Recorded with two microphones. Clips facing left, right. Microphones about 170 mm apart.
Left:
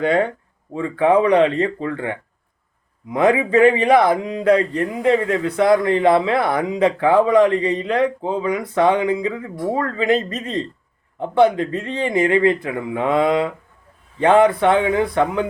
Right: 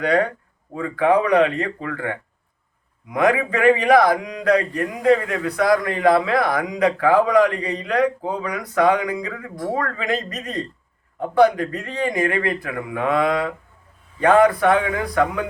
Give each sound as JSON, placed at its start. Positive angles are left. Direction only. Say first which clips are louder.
{"t": 0.0, "sound": "speech", "louder": "left 1 dB", "side_deg": 25}